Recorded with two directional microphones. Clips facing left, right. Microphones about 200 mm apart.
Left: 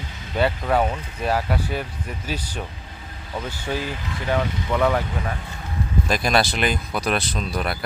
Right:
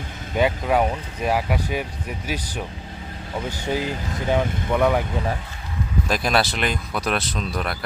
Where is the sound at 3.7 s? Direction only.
20° right (ahead or behind).